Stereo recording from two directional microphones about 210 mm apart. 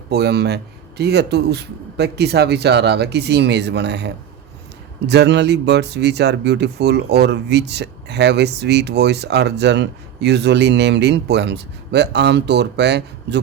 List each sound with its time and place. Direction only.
0.1 s speech: 50° right (ahead or behind)